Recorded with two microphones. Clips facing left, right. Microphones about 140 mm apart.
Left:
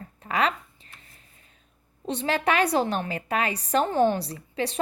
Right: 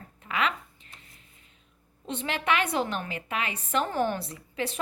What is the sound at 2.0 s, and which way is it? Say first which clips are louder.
A woman's voice: left 4 dB; 35° left (ahead or behind).